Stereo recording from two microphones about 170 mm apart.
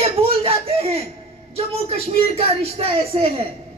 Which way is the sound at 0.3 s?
35° right (ahead or behind).